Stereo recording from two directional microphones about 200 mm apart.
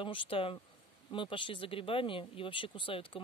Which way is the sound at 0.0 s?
25° left (ahead or behind).